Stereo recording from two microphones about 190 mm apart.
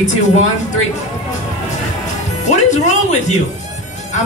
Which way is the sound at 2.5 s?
40° left (ahead or behind).